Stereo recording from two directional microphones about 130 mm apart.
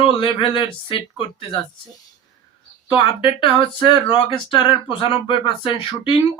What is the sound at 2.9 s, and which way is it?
Speech, 40° left (ahead or behind).